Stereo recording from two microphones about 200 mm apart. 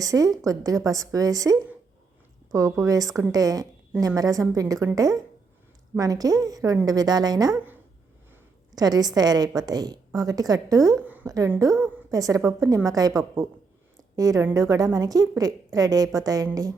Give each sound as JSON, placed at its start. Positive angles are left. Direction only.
{"t": 0.0, "sound": "a woman's voice", "side_deg": -15}